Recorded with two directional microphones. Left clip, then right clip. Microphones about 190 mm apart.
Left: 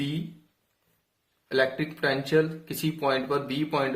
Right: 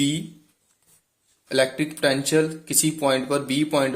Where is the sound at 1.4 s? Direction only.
30° right (ahead or behind).